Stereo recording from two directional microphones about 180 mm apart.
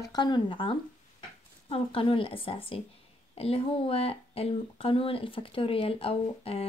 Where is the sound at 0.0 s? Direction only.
25° left (ahead or behind).